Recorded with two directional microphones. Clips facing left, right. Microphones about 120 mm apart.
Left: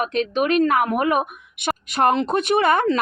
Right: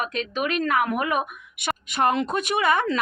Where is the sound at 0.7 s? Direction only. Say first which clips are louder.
Left 4 dB; 45° left (ahead or behind).